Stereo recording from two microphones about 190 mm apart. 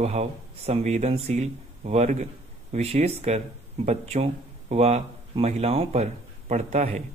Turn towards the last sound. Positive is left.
turn(degrees=-35)  # may be behind; listen again after turning